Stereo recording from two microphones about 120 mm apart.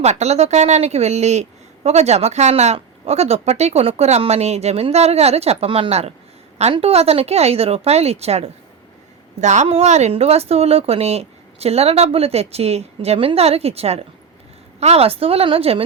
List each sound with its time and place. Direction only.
0.0 s speech: 65° right (ahead or behind)
9.4 s speech: 75° right (ahead or behind); by 15.8 s 55° right (ahead or behind)